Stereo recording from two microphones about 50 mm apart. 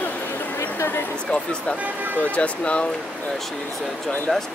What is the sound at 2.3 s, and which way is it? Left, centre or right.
Speech, left.